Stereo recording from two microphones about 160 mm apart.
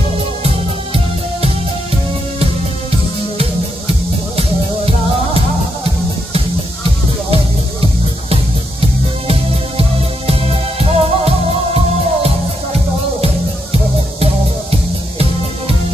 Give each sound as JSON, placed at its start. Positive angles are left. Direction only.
{"t": 9.3, "sound": "music", "side_deg": -35}
{"t": 14.2, "sound": "music", "side_deg": -40}